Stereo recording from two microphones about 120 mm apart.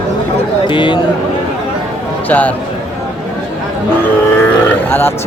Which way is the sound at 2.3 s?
15° left (ahead or behind).